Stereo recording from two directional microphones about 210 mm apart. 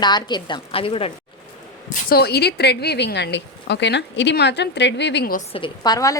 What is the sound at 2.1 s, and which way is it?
A woman's voice, 50° left (ahead or behind).